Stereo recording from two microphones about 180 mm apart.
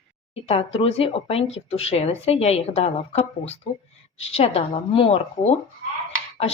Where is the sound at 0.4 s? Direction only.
35° left (ahead or behind).